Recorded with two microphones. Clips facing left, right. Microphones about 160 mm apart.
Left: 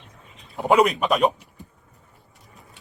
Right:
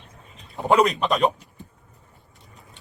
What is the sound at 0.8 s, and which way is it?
Speech, 10° left (ahead or behind).